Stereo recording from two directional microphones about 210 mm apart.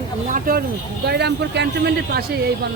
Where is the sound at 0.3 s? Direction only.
40° right (ahead or behind).